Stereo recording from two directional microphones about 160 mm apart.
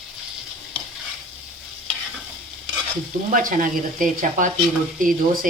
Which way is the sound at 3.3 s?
55° right (ahead or behind).